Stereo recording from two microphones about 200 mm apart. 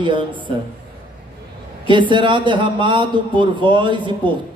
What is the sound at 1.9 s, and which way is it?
A man's voice, 25° right (ahead or behind).